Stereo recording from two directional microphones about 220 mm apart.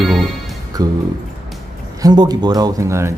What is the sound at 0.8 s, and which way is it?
Speech, 15° right (ahead or behind).